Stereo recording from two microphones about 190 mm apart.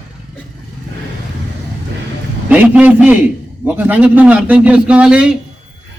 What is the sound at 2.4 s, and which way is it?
A man's voice, 10° right (ahead or behind).